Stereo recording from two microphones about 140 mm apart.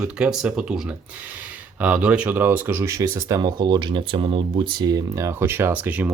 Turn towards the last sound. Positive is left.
turn(degrees=-10)  # may be behind; listen again after turning